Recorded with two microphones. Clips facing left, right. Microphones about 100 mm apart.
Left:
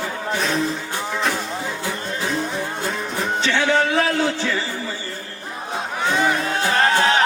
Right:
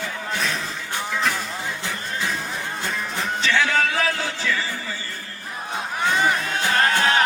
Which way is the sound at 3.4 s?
30° left (ahead or behind).